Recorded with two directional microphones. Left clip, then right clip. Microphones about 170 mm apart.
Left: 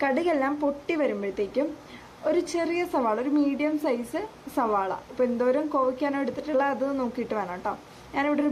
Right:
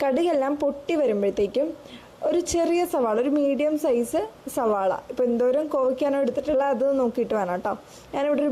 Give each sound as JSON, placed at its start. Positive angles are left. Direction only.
{"t": 0.0, "sound": "a woman's voice", "side_deg": -65}